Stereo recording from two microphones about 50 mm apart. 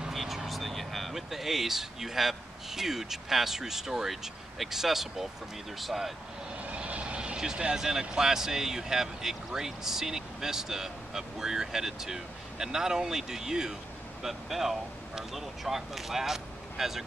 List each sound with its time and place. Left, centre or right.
0.1 s speech: centre
6.6 s vehicle: right
7.7 s speech: centre